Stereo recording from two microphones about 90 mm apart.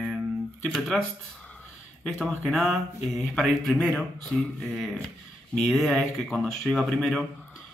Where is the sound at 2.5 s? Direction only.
Centre (ahead or behind).